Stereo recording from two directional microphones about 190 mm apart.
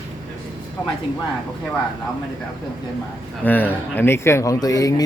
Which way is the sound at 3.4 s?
10° left (ahead or behind).